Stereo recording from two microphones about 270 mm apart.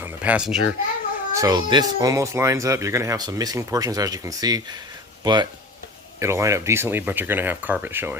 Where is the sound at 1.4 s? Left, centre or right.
Centre.